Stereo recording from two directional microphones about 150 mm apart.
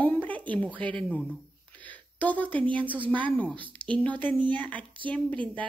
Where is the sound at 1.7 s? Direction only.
10° left (ahead or behind).